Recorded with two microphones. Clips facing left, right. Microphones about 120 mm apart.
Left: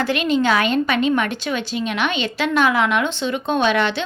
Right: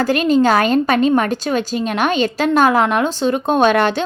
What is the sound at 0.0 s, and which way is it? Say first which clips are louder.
A woman's voice: right 5 dB; 40° right (ahead or behind).